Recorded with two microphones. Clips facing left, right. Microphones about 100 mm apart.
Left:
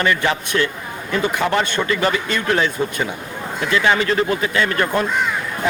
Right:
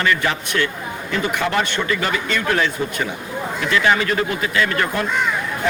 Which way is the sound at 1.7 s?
25° left (ahead or behind).